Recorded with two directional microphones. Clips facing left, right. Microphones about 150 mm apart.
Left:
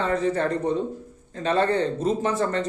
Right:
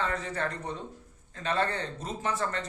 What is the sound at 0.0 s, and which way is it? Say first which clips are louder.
A man's voice: left 9 dB; 30° left (ahead or behind).